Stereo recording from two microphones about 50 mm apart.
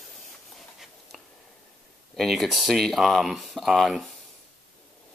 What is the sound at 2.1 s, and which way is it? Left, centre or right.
Speech, centre.